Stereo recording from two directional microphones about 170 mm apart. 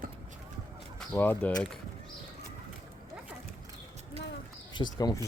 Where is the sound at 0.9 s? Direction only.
10° left (ahead or behind).